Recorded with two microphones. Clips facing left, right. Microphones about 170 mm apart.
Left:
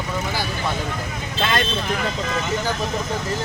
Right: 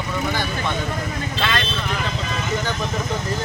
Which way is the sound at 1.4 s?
45° left (ahead or behind).